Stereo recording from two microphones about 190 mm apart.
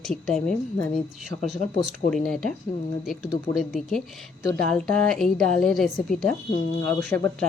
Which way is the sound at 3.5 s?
Centre (ahead or behind).